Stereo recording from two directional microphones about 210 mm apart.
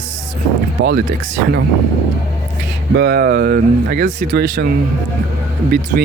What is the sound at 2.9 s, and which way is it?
Speech, 55° right (ahead or behind).